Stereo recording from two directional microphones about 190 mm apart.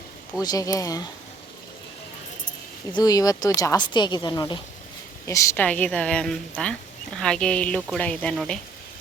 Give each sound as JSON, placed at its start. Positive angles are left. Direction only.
{"t": 0.4, "sound": "a woman's voice", "side_deg": 20}
{"t": 2.9, "sound": "a woman's voice", "side_deg": 20}